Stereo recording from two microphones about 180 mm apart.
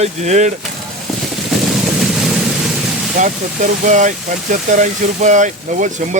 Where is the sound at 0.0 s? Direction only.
40° right (ahead or behind).